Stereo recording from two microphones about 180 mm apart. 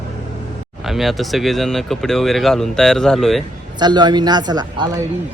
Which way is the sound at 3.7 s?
25° right (ahead or behind).